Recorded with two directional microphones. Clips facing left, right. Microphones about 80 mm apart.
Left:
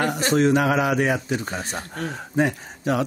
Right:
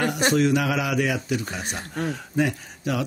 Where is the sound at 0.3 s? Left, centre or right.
Left.